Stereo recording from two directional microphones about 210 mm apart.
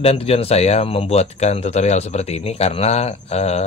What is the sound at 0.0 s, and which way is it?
Speech, 30° left (ahead or behind).